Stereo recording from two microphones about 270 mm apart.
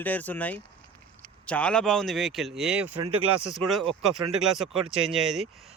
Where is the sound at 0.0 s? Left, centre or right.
Centre.